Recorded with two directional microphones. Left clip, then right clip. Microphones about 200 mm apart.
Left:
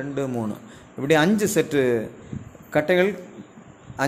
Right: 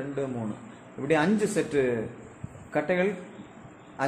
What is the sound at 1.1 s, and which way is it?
A man's voice, 55° left (ahead or behind).